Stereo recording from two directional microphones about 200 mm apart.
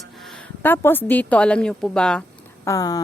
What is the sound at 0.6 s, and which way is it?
A woman's voice, 10° left (ahead or behind).